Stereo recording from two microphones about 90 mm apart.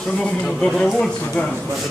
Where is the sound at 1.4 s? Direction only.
20° left (ahead or behind).